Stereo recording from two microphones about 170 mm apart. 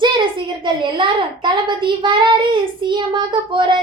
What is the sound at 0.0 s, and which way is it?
A child's voice, 25° right (ahead or behind).